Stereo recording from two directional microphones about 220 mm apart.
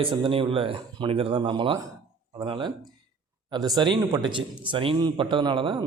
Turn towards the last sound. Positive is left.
turn(degrees=-20)  # may be behind; listen again after turning